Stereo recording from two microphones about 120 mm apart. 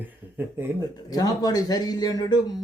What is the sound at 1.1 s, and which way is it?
A man's voice, 30° left (ahead or behind).